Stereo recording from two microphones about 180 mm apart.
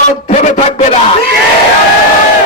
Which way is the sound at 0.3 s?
40° left (ahead or behind).